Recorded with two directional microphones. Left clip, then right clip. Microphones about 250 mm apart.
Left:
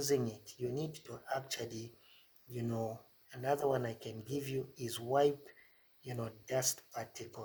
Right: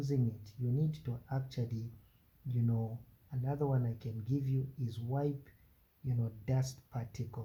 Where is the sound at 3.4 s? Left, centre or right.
Left.